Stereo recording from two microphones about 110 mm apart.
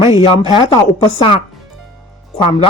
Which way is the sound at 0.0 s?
60° left (ahead or behind).